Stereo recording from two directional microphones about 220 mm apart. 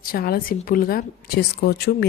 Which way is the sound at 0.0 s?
45° left (ahead or behind).